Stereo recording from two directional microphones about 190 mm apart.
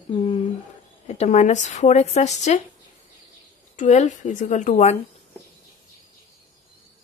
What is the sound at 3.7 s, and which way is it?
Speech, 40° left (ahead or behind).